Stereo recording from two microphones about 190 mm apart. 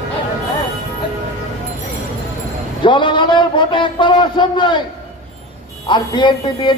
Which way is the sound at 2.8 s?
25° left (ahead or behind).